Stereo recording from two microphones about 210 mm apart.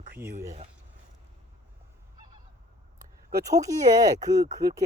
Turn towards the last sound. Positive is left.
turn(degrees=-15)  # may be behind; listen again after turning